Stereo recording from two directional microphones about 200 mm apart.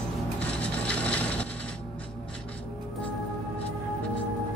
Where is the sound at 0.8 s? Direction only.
5° left (ahead or behind).